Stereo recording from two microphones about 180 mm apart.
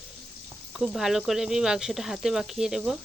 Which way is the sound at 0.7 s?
Centre (ahead or behind).